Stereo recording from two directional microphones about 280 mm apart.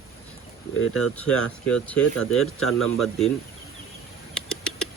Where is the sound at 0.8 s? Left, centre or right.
Left.